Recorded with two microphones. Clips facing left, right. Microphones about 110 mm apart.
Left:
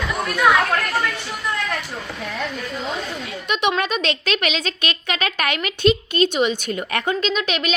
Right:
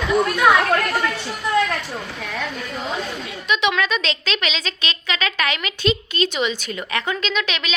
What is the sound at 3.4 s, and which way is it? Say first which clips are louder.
A woman's voice: even; 55° left (ahead or behind).